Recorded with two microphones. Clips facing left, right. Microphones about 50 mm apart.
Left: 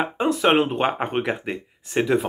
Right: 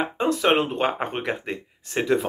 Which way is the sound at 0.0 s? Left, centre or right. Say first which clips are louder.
Left 2 dB; centre.